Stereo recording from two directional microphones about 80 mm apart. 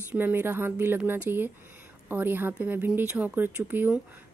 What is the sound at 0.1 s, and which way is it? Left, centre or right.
A woman's voice, right.